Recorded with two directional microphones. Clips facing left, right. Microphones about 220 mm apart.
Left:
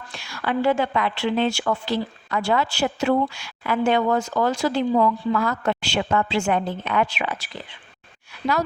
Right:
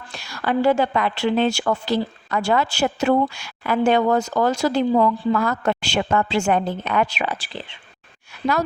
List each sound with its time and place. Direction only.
0.2 s speech: 40° right (ahead or behind)